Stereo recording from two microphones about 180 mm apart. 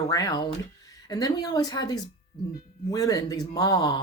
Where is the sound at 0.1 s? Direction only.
20° left (ahead or behind).